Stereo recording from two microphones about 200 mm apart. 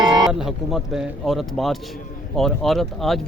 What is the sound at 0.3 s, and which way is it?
Speech, centre (ahead or behind).